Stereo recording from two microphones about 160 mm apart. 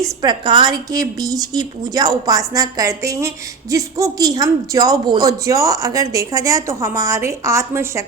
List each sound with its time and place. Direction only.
0.2 s a woman's voice: 30° right (ahead or behind)